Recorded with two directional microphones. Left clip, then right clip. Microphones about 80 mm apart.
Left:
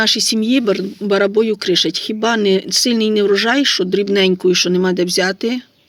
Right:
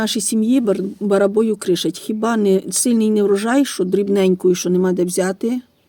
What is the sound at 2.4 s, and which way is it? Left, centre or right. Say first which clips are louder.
Speech: left 3 dB; right.